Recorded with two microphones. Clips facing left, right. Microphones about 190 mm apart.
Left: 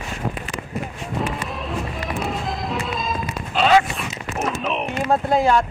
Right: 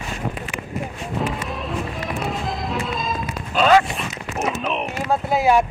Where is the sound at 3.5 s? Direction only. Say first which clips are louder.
Right 1 dB; 45° right (ahead or behind).